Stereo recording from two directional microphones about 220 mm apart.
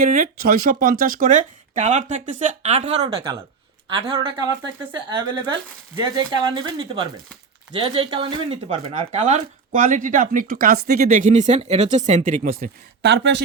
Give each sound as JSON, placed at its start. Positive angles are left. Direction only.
{"t": 0.0, "sound": "speech", "side_deg": -35}